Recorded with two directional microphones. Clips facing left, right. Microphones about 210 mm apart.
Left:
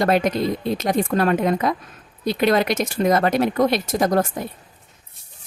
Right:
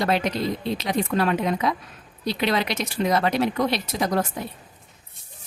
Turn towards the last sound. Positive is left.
turn(degrees=50)  # may be behind; listen again after turning